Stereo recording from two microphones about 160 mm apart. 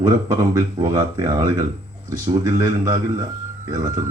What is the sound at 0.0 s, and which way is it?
A man's voice, 25° right (ahead or behind).